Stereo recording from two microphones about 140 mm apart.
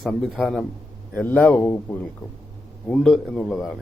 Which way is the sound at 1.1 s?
15° left (ahead or behind).